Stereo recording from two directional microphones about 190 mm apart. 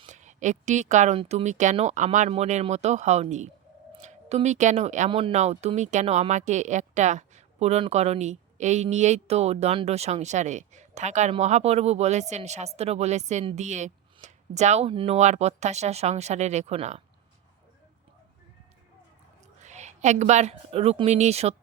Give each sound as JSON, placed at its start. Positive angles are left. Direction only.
{"t": 0.1, "sound": "speech", "side_deg": -40}
{"t": 19.6, "sound": "a woman's voice", "side_deg": -40}